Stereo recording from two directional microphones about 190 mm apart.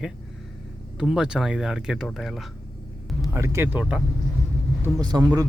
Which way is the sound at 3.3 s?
15° right (ahead or behind).